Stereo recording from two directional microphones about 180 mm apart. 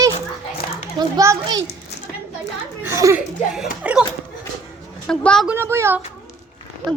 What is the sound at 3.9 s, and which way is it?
Dog, 10° right (ahead or behind).